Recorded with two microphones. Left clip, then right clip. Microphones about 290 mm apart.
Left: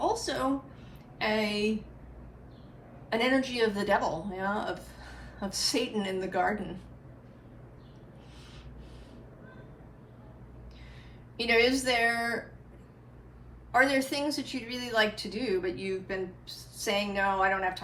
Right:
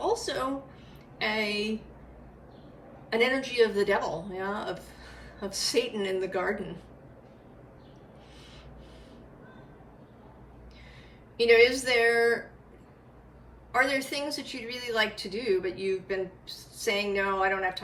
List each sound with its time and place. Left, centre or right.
0.0 s a sound: centre
1.2 s a woman's voice: centre
3.1 s a woman's voice: centre
11.3 s a woman's voice: centre
13.7 s a woman's voice: centre